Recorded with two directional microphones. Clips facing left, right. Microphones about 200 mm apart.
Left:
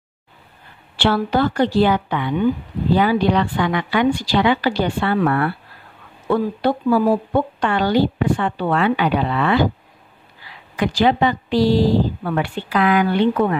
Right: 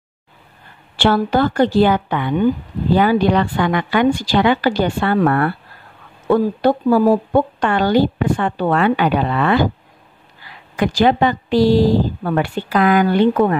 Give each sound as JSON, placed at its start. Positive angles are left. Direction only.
{"t": 0.9, "sound": "a woman's voice", "side_deg": -45}
{"t": 10.8, "sound": "a woman's voice", "side_deg": -45}